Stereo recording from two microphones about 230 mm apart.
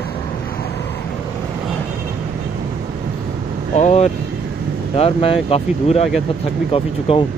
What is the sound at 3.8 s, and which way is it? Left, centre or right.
Speech, left.